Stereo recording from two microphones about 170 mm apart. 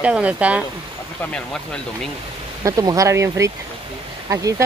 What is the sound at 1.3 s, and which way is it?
Speech, 5° left (ahead or behind).